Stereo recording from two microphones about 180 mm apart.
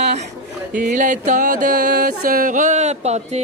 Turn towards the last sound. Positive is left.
turn(degrees=-40)  # may be behind; listen again after turning